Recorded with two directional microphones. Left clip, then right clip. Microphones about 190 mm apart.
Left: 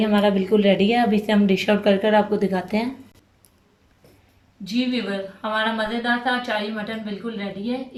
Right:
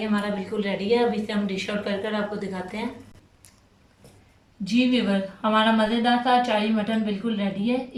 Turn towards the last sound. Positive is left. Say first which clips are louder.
# right 2 dB
turn(degrees=-5)  # may be behind; listen again after turning